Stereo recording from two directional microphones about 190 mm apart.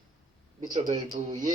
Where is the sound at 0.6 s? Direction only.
40° right (ahead or behind).